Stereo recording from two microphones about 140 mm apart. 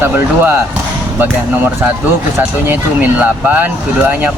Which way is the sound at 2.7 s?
10° right (ahead or behind).